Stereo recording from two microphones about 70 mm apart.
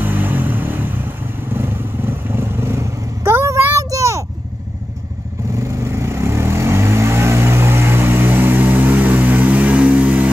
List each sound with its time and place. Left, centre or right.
0.0 s vehicle: right
3.7 s a sound: right
5.6 s vehicle: right